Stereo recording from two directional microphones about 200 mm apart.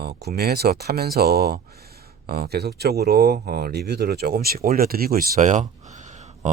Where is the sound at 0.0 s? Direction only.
50° right (ahead or behind).